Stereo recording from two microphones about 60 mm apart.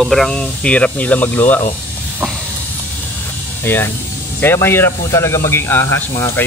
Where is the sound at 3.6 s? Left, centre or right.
Left.